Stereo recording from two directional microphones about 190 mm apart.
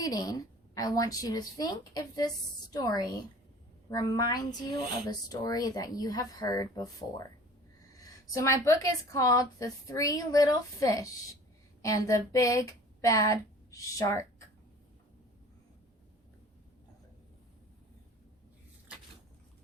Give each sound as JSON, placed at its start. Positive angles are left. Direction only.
{"t": 0.0, "sound": "a woman's voice", "side_deg": 20}
{"t": 7.9, "sound": "a woman's voice", "side_deg": 20}